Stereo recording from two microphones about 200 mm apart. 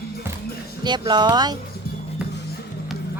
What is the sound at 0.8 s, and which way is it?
Speech, 20° right (ahead or behind).